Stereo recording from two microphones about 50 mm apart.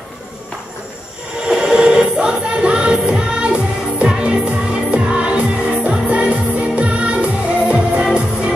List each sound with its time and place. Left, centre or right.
1.5 s music: centre
8.0 s music: centre